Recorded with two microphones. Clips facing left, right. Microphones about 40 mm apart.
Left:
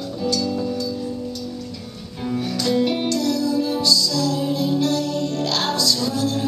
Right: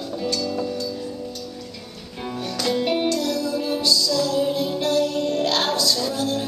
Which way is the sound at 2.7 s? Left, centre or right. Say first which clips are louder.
Left 1 dB; centre.